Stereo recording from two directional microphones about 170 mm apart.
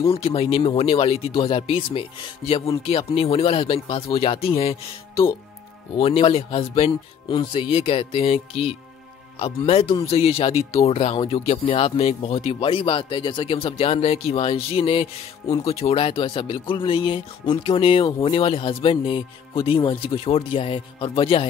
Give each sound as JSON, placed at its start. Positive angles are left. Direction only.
{"t": 0.0, "sound": "speech", "side_deg": 35}